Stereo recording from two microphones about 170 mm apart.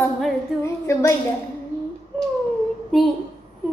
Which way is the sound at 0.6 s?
15° left (ahead or behind).